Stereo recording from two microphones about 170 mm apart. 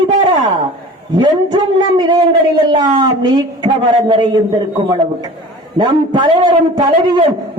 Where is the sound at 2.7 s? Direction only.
25° right (ahead or behind).